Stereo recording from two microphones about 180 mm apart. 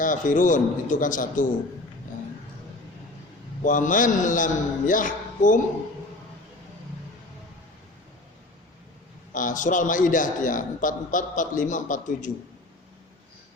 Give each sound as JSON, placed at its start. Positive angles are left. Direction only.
{"t": 0.0, "sound": "a man's voice", "side_deg": 45}
{"t": 3.6, "sound": "a man's voice", "side_deg": 45}
{"t": 9.3, "sound": "a man's voice", "side_deg": 45}